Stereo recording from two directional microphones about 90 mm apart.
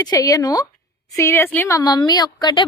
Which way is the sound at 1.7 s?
50° left (ahead or behind).